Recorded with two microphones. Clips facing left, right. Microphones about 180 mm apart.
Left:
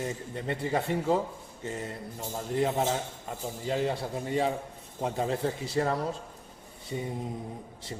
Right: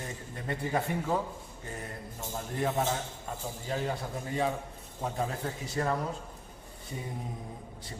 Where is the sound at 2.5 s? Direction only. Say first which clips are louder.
Left 3 dB; 20° left (ahead or behind).